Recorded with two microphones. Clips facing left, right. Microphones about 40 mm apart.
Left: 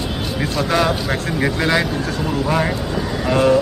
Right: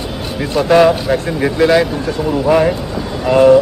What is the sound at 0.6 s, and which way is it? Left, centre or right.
Speech, right.